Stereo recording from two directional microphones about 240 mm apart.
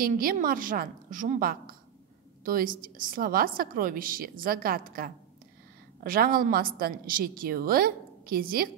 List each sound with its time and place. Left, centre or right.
0.0 s a woman's voice: right